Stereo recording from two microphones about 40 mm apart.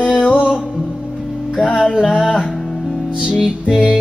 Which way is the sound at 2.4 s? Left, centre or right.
Centre.